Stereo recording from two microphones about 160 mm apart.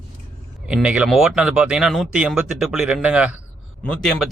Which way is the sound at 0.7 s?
5° right (ahead or behind).